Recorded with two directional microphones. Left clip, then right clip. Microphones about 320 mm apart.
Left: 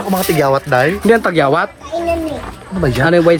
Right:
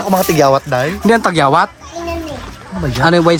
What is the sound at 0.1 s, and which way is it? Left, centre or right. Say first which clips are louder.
Speech: right 3 dB; right.